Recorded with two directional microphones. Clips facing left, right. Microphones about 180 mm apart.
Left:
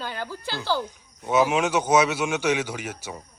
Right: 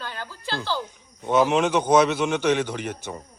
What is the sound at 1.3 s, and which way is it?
A man's voice, 5° left (ahead or behind).